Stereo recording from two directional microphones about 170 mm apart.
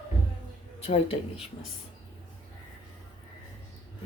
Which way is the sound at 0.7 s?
35° left (ahead or behind).